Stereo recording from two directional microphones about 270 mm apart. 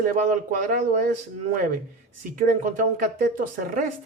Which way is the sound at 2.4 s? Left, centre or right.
Right.